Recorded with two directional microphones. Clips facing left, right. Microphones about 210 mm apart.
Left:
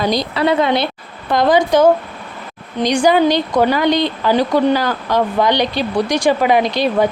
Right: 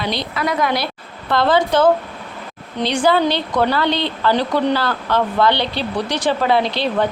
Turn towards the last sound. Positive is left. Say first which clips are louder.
# left 3 dB
turn(degrees=15)  # may be behind; listen again after turning